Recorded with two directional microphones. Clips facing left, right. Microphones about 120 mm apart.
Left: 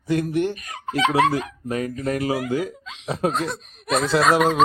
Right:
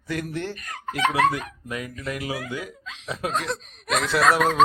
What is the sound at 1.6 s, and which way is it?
Speech, 40° left (ahead or behind).